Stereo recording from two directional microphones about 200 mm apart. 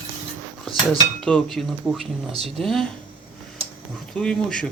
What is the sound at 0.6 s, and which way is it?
Speech, centre (ahead or behind).